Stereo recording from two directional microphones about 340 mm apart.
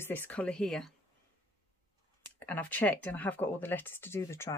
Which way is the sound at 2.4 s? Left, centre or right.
Centre.